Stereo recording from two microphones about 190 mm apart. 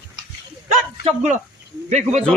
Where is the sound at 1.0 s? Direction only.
35° right (ahead or behind).